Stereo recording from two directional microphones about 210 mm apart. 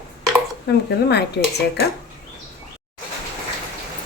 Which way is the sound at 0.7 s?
55° left (ahead or behind).